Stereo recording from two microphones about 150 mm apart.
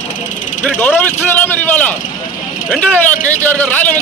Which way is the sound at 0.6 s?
10° left (ahead or behind).